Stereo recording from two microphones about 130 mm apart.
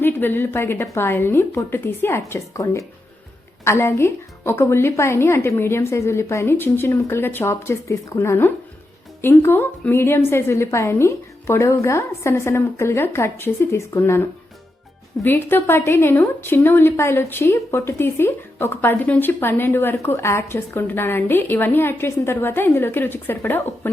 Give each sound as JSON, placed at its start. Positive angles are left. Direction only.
{"t": 0.0, "sound": "a woman's voice", "side_deg": 15}